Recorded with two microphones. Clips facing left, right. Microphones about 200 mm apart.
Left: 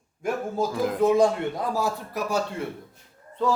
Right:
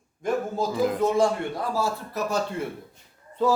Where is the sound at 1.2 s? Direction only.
20° left (ahead or behind).